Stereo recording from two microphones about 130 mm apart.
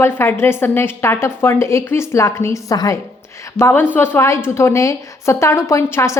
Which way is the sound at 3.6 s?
15° left (ahead or behind).